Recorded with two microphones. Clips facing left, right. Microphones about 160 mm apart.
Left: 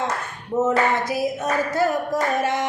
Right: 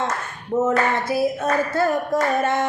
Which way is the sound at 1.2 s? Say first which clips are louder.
Right 2 dB; 15° left (ahead or behind).